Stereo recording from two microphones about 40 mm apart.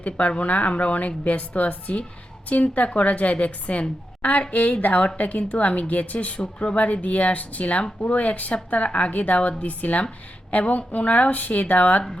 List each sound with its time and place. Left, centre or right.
0.0 s a woman's voice: left
6.4 s speech: left
6.7 s a woman's voice: left